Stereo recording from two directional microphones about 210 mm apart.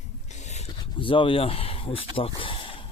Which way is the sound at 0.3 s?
35° left (ahead or behind).